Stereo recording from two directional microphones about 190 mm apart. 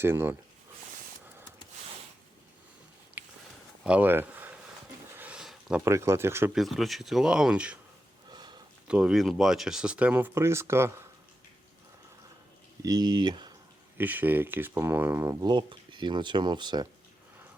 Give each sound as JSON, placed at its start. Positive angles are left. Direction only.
{"t": 0.0, "sound": "speech", "side_deg": -10}
{"t": 3.2, "sound": "a sound", "side_deg": -10}
{"t": 5.8, "sound": "speech", "side_deg": -15}
{"t": 6.5, "sound": "speech", "side_deg": 0}
{"t": 8.3, "sound": "a sound", "side_deg": -20}
{"t": 8.9, "sound": "speech", "side_deg": -5}
{"t": 12.8, "sound": "speech", "side_deg": -20}
{"t": 14.0, "sound": "speech", "side_deg": -10}